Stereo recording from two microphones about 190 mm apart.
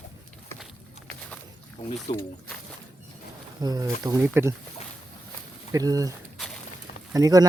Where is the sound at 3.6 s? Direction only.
20° right (ahead or behind).